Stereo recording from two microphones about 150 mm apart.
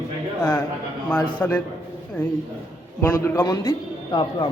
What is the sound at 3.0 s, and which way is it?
A man's voice, 15° left (ahead or behind).